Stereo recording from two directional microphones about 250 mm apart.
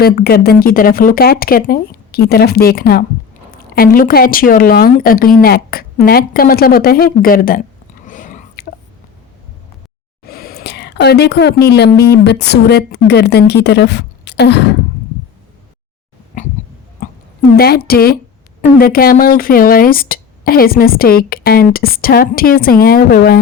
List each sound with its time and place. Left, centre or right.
0.0 s speech: left
8.0 s whispering: left
10.2 s a sound: left
12.1 s a woman's voice: left
16.3 s goat: left
17.0 s a sound: left
17.6 s speech: left